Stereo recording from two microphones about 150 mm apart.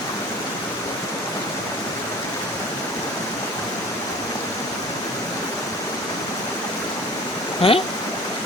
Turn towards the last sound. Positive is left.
turn(degrees=40)  # may be behind; listen again after turning